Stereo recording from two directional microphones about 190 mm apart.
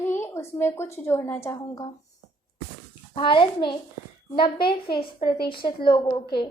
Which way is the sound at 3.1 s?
25° left (ahead or behind).